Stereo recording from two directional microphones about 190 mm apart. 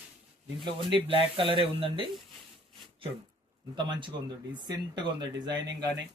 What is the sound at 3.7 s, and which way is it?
Speech, 25° right (ahead or behind).